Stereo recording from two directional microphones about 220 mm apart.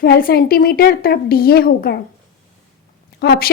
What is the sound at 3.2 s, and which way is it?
Speech, 45° left (ahead or behind).